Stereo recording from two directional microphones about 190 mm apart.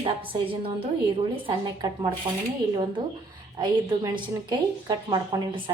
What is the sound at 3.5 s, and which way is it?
A woman's voice, 25° right (ahead or behind).